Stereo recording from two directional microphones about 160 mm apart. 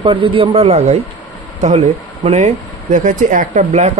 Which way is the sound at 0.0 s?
30° right (ahead or behind).